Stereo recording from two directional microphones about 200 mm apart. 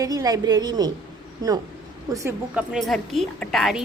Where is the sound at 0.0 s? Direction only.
20° right (ahead or behind).